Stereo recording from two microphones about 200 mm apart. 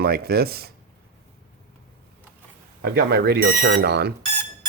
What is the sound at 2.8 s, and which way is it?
Speech, 50° right (ahead or behind).